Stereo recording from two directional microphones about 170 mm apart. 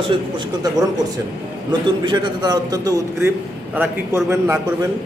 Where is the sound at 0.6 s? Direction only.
25° right (ahead or behind).